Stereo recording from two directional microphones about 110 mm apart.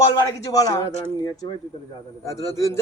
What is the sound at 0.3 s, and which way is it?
Speech, 30° left (ahead or behind).